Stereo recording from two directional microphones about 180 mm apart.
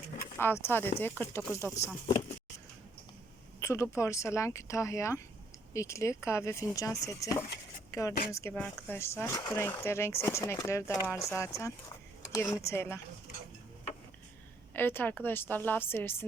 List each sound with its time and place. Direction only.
0.3 s speech: 10° left (ahead or behind)
3.6 s speech: 15° left (ahead or behind)
7.9 s a sound: 15° left (ahead or behind)
8.3 s speech: 15° left (ahead or behind)
14.7 s speech: 10° left (ahead or behind)